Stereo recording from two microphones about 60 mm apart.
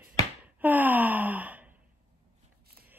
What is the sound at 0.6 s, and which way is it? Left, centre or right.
Wail, right.